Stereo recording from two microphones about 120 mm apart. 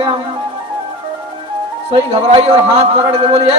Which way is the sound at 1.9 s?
50° right (ahead or behind).